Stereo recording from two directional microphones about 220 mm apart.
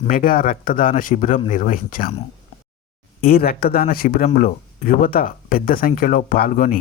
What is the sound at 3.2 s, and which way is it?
Speech, 45° left (ahead or behind).